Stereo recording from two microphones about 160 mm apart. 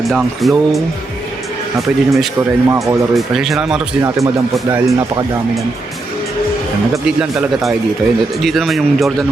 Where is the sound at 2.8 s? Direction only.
Centre (ahead or behind).